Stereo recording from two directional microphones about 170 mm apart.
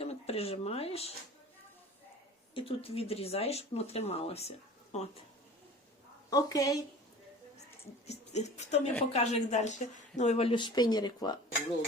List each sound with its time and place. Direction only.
0.0 s speech: 35° left (ahead or behind)
2.6 s speech: 35° left (ahead or behind)
6.3 s a woman's voice: 20° left (ahead or behind)
8.0 s speech: 40° left (ahead or behind); by 11.3 s 25° left (ahead or behind)